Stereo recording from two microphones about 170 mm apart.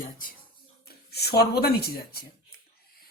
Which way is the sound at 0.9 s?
70° left (ahead or behind).